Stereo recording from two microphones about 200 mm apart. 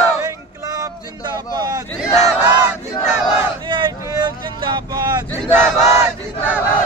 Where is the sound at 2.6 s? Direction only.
10° right (ahead or behind).